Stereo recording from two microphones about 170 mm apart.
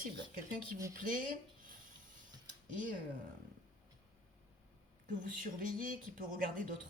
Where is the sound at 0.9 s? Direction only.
50° right (ahead or behind).